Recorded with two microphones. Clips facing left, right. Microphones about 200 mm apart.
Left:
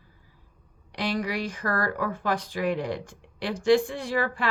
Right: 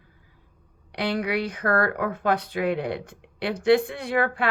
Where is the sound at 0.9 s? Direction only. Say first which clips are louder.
Right 3 dB; 60° right (ahead or behind).